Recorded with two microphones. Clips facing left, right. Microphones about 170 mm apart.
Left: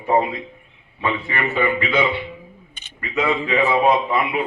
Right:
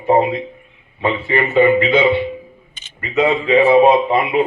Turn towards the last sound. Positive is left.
turn(degrees=-25)  # may be behind; listen again after turning